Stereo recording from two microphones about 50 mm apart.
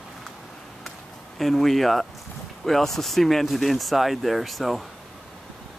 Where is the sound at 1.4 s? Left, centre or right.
Centre.